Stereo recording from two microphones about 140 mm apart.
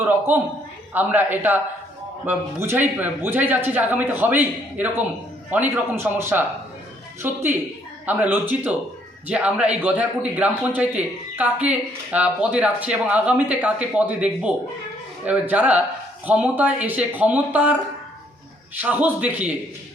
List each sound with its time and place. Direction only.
0.3 s speech: 15° right (ahead or behind)
18.8 s speech: 10° right (ahead or behind)